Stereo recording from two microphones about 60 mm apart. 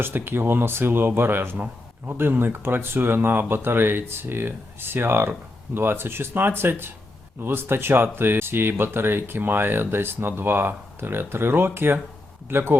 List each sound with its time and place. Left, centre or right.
0.0 s speech: right